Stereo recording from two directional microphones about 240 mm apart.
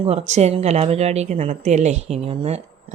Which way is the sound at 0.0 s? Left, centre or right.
Right.